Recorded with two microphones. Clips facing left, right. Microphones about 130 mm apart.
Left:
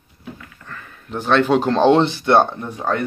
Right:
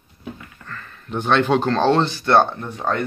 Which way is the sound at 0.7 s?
10° left (ahead or behind).